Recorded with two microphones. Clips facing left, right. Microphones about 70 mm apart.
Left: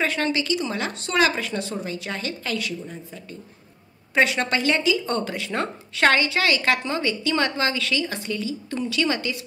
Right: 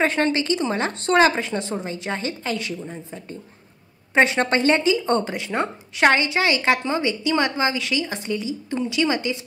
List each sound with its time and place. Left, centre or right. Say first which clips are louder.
0.0 s speech: right 3 dB; right
4.1 s speech: right 3 dB; right